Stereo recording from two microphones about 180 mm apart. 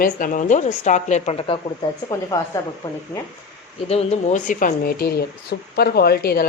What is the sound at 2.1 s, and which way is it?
Speech, 15° left (ahead or behind).